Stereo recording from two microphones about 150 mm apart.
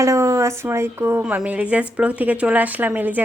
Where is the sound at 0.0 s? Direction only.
20° right (ahead or behind).